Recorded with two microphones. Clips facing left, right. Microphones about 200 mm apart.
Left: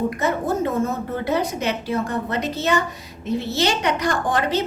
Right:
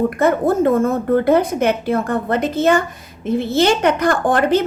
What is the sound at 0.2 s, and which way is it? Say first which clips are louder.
A woman's voice: right 7 dB; 55° right (ahead or behind).